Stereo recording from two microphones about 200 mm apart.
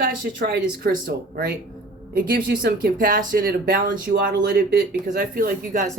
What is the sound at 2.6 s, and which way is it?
Speech, 45° right (ahead or behind).